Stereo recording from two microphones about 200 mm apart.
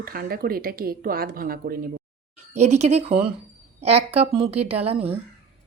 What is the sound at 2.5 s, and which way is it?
Speech, 35° right (ahead or behind).